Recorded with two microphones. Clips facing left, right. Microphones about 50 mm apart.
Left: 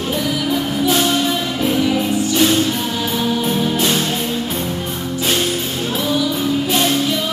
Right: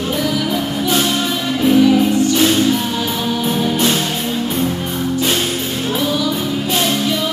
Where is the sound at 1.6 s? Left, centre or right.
Centre.